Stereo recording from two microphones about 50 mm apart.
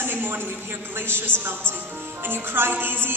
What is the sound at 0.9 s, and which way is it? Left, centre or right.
A woman's voice, right.